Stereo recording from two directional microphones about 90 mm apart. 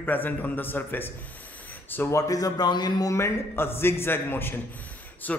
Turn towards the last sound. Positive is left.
turn(degrees=15)  # may be behind; listen again after turning